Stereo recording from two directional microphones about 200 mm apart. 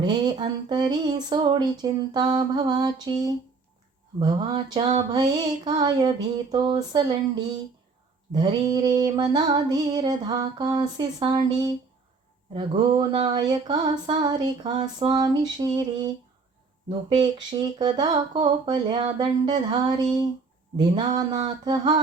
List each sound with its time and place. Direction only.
0.0 s female singing: 20° right (ahead or behind)